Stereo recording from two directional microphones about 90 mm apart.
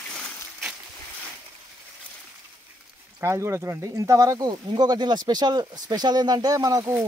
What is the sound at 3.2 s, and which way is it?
Speech, 30° right (ahead or behind).